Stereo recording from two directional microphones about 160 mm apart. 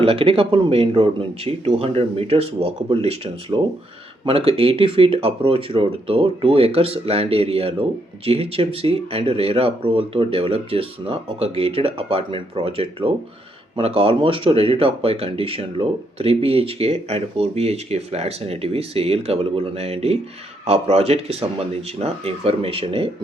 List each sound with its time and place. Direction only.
0.0 s speech: 35° right (ahead or behind)